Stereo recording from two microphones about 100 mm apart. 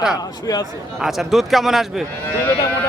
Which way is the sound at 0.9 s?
Centre (ahead or behind).